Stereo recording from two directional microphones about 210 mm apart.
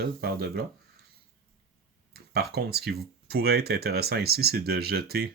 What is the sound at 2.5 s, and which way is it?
Speech, 50° right (ahead or behind).